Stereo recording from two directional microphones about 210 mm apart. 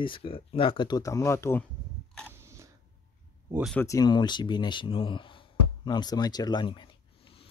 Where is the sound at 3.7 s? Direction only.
15° left (ahead or behind).